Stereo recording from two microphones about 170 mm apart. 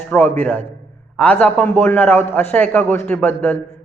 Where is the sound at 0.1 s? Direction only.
10° left (ahead or behind).